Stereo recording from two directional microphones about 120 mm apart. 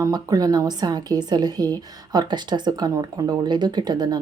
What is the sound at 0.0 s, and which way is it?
Speech, 30° right (ahead or behind).